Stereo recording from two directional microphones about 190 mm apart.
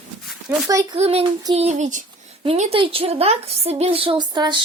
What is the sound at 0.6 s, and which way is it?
Speech, 15° right (ahead or behind).